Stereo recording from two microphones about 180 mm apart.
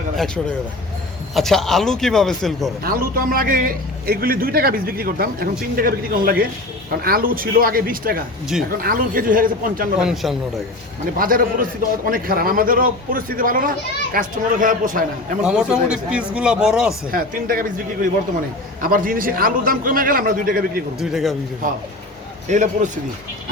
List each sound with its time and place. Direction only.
1.3 s speech: centre (ahead or behind)
2.8 s a man's voice: 55° right (ahead or behind)
10.0 s speech: centre (ahead or behind)
11.2 s a man's voice: 50° right (ahead or behind)
15.4 s speech: 5° right (ahead or behind)
17.1 s a man's voice: 50° right (ahead or behind)
21.0 s speech: centre (ahead or behind)
22.4 s a man's voice: 45° right (ahead or behind)